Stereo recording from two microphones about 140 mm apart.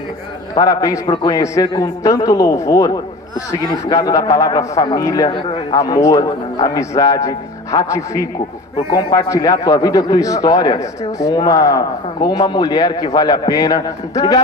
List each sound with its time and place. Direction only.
0.6 s a man's voice: 25° left (ahead or behind)
5.3 s a man's voice: 35° left (ahead or behind)
5.8 s a man's voice: 25° left (ahead or behind)